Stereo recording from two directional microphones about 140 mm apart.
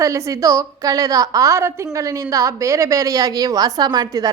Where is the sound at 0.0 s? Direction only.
20° right (ahead or behind).